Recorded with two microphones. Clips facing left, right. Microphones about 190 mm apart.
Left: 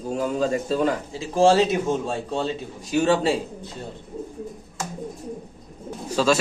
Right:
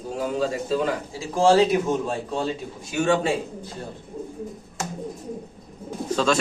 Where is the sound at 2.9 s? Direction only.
35° left (ahead or behind).